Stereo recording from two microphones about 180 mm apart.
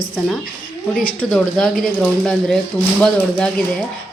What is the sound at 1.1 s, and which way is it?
A woman's voice, 5° left (ahead or behind).